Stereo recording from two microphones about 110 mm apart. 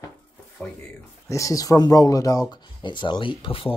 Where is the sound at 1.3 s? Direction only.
30° left (ahead or behind).